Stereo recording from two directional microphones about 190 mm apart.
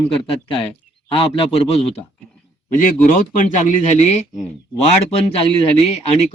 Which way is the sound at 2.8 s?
45° left (ahead or behind).